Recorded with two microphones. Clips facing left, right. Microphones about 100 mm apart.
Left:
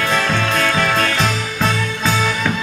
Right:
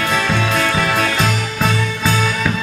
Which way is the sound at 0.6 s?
5° right (ahead or behind).